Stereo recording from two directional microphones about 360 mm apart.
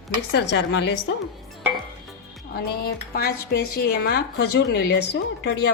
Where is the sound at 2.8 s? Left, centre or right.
Left.